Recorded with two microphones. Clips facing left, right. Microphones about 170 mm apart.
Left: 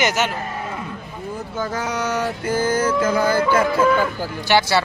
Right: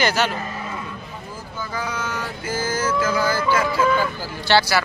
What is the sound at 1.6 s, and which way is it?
Speech, 75° left (ahead or behind).